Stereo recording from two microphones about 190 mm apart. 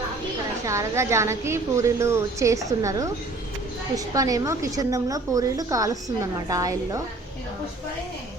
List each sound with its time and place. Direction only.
0.6 s a woman's voice: 15° right (ahead or behind)